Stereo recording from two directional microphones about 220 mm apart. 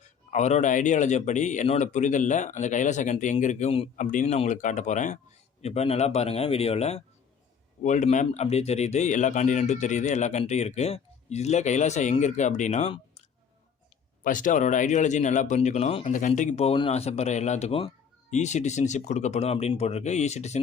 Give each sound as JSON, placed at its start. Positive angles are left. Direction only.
{"t": 0.3, "sound": "speech", "side_deg": 30}
{"t": 14.3, "sound": "speech", "side_deg": 35}